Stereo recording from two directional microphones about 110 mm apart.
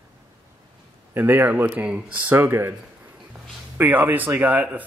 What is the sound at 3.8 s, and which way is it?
Speech, 15° right (ahead or behind).